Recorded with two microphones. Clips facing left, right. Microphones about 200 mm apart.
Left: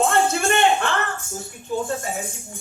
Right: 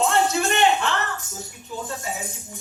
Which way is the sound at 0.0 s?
55° left (ahead or behind).